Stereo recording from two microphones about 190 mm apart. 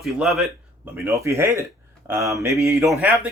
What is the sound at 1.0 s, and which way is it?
Speech, 15° right (ahead or behind).